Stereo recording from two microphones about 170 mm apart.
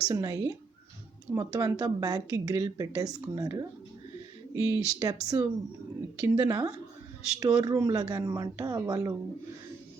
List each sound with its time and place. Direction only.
0.1 s a woman's voice: 20° right (ahead or behind)